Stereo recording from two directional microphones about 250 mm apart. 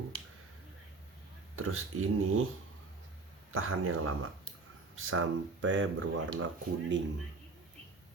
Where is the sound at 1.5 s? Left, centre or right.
Right.